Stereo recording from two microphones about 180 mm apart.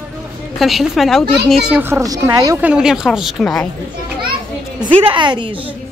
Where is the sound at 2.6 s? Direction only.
5° right (ahead or behind).